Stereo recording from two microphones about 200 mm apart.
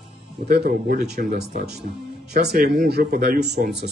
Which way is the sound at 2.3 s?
50° right (ahead or behind).